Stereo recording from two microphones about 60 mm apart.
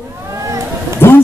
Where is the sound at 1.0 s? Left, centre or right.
Left.